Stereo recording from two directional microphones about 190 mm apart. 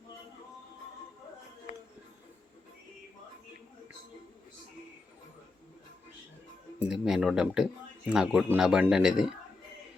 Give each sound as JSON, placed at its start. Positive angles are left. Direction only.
{"t": 1.7, "sound": "music", "side_deg": 45}
{"t": 6.8, "sound": "speech", "side_deg": 0}